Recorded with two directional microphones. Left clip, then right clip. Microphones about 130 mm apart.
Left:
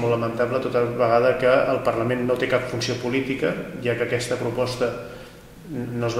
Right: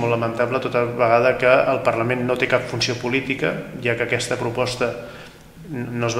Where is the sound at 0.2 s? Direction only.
30° right (ahead or behind).